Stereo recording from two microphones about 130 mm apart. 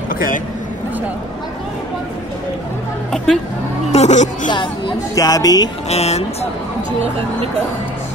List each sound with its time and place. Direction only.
0.1 s a sound: 90° left
3.9 s a woman's voice: 60° left (ahead or behind)
4.5 s speech: 35° left (ahead or behind)
5.9 s speech: 55° left (ahead or behind)